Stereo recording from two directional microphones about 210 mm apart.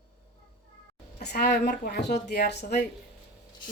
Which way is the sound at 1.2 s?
50° left (ahead or behind).